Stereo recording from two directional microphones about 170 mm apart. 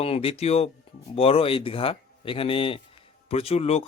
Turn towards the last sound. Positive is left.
turn(degrees=40)  # may be behind; listen again after turning